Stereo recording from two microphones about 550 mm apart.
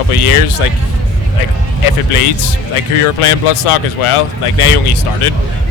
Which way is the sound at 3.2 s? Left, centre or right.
Left.